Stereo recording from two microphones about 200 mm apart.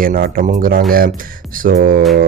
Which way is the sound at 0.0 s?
45° right (ahead or behind).